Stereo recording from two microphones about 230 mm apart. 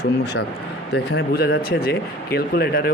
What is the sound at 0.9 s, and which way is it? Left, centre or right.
Speech, left.